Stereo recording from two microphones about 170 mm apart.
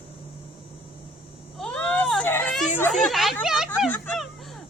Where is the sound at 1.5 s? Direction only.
5° left (ahead or behind).